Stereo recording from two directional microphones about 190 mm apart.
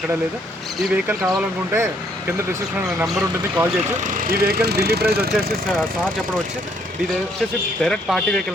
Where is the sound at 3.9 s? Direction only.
45° right (ahead or behind).